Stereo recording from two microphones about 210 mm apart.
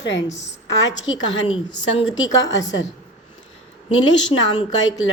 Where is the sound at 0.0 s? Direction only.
60° left (ahead or behind).